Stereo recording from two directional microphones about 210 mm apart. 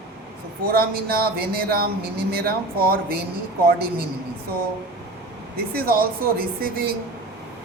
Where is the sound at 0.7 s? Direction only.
45° right (ahead or behind).